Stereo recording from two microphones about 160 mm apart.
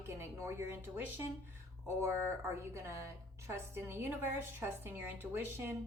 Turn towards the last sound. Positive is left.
turn(degrees=-15)  # may be behind; listen again after turning